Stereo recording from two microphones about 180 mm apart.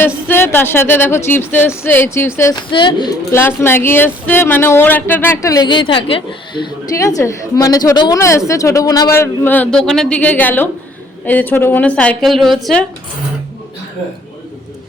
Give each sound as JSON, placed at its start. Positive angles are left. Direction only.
{"t": 0.3, "sound": "speech", "side_deg": 10}
{"t": 2.6, "sound": "speech", "side_deg": 25}
{"t": 3.3, "sound": "speech", "side_deg": 15}